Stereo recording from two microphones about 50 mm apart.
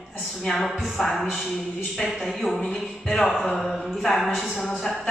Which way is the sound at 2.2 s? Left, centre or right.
Centre.